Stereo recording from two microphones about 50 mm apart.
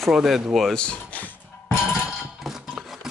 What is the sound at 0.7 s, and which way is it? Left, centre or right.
Speech, left.